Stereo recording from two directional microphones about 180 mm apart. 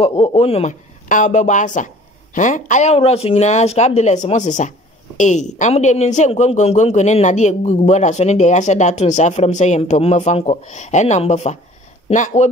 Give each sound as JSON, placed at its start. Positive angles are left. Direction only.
{"t": 0.0, "sound": "speech", "side_deg": 30}